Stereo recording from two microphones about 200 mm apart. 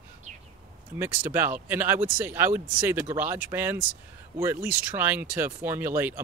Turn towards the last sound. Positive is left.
turn(degrees=-10)  # may be behind; listen again after turning